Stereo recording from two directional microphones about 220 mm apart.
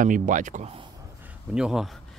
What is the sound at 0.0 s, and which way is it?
Speech, 35° right (ahead or behind).